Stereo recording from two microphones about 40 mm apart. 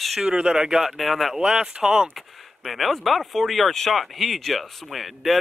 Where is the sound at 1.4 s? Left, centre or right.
Centre.